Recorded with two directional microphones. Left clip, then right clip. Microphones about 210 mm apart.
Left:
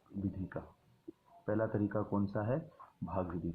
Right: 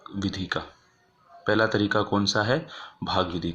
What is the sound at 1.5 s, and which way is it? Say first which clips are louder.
Speech: right 13 dB; 30° right (ahead or behind).